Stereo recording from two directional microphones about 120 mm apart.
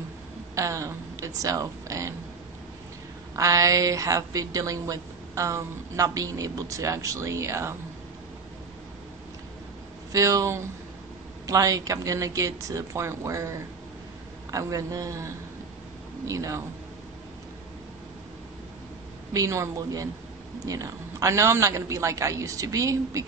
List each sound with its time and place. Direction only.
0.6 s speech: 25° right (ahead or behind)
3.3 s a woman's voice: 30° right (ahead or behind)
10.1 s a woman's voice: 25° right (ahead or behind)
19.3 s a woman's voice: 25° right (ahead or behind)